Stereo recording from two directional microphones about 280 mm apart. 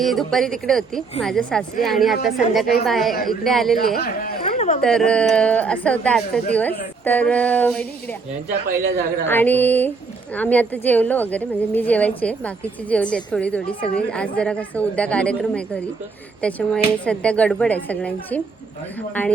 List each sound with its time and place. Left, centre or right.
0.0 s a woman's voice: centre
3.9 s speech: left
4.4 s a sound: left
4.8 s a woman's voice: centre
8.6 s a man's voice: right
9.2 s music: centre
10.3 s a woman's voice: centre
19.2 s music: centre